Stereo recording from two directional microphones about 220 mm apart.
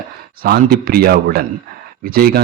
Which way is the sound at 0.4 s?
45° right (ahead or behind).